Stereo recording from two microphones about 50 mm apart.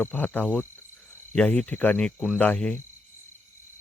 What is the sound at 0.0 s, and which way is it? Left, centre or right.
Speech, left.